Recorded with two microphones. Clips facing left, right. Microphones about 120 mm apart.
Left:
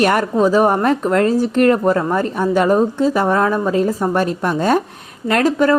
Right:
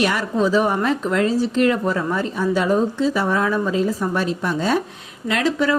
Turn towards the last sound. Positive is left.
turn(degrees=50)  # may be behind; listen again after turning